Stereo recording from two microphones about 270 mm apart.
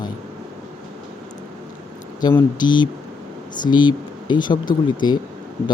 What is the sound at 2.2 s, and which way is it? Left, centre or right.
Speech, centre.